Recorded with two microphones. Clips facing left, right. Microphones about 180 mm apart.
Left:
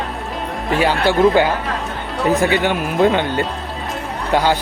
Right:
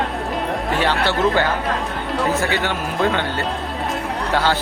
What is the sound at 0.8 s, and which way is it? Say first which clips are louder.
Speech: left 6 dB; 10° left (ahead or behind).